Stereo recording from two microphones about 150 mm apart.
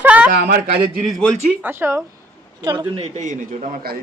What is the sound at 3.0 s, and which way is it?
Speech, 50° right (ahead or behind).